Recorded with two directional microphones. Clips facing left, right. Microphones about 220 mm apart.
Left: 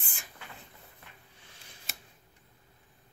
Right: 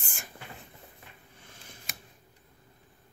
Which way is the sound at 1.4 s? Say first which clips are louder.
Right 7 dB; 50° right (ahead or behind).